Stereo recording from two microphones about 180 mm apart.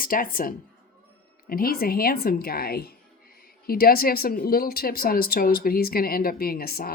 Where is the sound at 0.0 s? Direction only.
50° left (ahead or behind).